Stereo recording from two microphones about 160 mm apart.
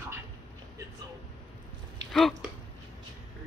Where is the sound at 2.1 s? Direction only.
Centre (ahead or behind).